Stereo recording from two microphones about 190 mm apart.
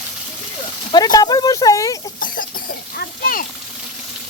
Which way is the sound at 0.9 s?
20° left (ahead or behind).